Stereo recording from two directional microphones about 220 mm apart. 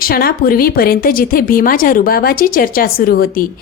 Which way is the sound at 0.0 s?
40° left (ahead or behind).